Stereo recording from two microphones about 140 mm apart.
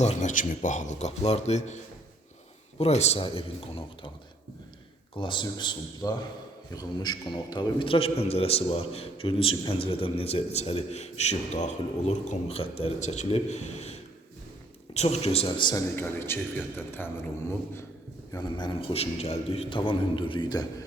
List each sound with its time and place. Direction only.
0.0 s a man's voice: 55° left (ahead or behind); by 4.1 s 40° left (ahead or behind)
5.1 s a man's voice: 35° left (ahead or behind)
16.0 s a man's voice: 15° left (ahead or behind)
18.3 s a man's voice: 30° left (ahead or behind)